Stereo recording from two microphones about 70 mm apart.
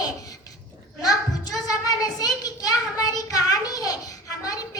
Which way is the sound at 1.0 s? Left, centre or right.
Left.